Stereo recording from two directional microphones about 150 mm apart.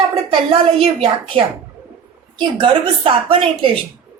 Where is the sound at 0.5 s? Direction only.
40° right (ahead or behind).